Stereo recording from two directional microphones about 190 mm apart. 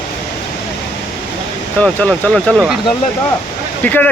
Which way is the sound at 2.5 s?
5° right (ahead or behind).